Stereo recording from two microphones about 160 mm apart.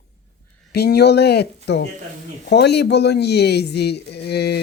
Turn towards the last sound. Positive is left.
turn(degrees=90)